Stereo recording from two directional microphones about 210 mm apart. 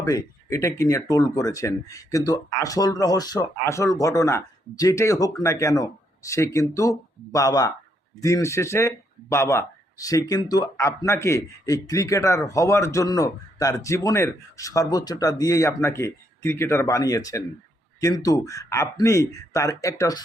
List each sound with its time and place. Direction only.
0.0 s speech: 15° left (ahead or behind)